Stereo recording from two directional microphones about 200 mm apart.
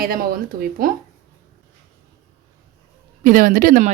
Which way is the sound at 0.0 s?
50° right (ahead or behind).